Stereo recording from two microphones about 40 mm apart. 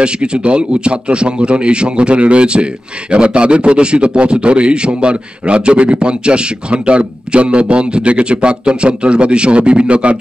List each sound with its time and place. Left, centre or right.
0.0 s a man's voice: right